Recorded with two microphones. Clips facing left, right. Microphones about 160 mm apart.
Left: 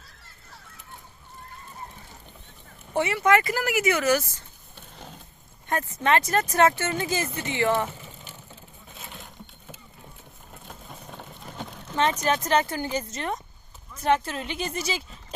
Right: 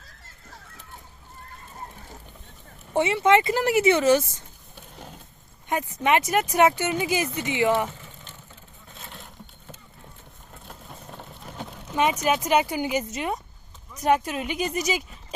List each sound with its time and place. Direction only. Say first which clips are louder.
2.9 s speech: right 2 dB; 20° right (ahead or behind)
4.7 s a sound: right 1 dB; 10° right (ahead or behind)
5.6 s speech: right 1 dB; 15° right (ahead or behind)
7.9 s vehicle: even; 10° left (ahead or behind)
8.9 s a sound: even; centre (ahead or behind)
10.5 s vehicle: even; centre (ahead or behind)
13.9 s speech: right 2 dB; 15° right (ahead or behind)